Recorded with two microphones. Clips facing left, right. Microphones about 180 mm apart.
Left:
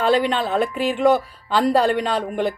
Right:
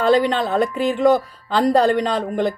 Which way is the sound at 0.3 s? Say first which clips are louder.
Right 2 dB; 40° right (ahead or behind).